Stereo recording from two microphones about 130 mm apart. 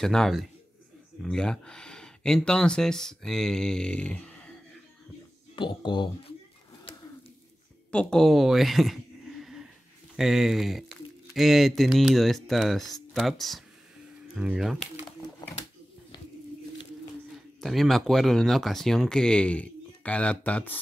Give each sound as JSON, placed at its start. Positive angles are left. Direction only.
{"t": 0.0, "sound": "speech", "side_deg": 5}
{"t": 5.6, "sound": "speech", "side_deg": 35}
{"t": 7.9, "sound": "speech", "side_deg": 5}
{"t": 17.6, "sound": "speech", "side_deg": 0}